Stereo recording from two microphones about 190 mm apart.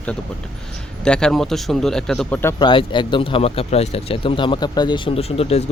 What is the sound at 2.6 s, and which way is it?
Speech, 25° left (ahead or behind).